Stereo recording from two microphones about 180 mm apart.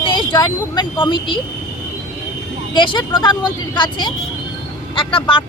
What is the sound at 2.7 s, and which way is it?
A woman's voice, 25° left (ahead or behind).